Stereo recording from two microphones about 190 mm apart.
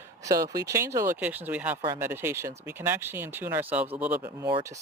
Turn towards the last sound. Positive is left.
turn(degrees=-10)  # may be behind; listen again after turning